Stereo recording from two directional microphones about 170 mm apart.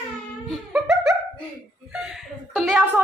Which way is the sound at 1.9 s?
5° right (ahead or behind).